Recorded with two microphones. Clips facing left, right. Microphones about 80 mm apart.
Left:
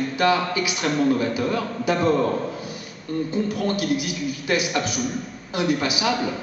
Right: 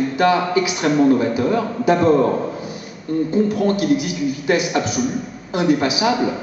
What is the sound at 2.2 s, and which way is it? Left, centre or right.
Speech, centre.